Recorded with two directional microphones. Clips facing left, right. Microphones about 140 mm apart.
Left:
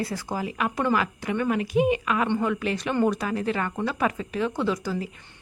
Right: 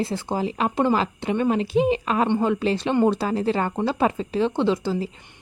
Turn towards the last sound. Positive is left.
turn(degrees=-25)  # may be behind; listen again after turning